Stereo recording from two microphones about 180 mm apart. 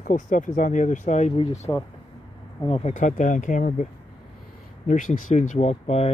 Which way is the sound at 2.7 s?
40° left (ahead or behind).